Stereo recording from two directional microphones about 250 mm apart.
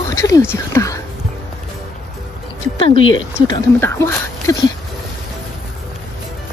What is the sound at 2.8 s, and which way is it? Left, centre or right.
Speech, centre.